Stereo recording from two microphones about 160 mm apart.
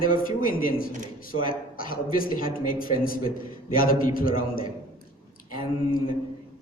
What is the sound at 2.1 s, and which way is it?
A man's voice, 60° left (ahead or behind).